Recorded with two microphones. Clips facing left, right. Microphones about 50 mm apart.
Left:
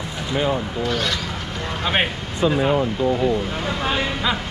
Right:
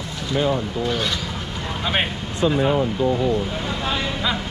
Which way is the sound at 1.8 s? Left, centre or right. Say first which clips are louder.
Left 2 dB; centre.